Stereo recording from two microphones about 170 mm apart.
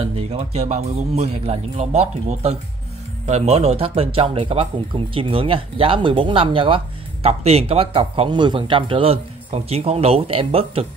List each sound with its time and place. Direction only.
0.0 s speech: 35° right (ahead or behind)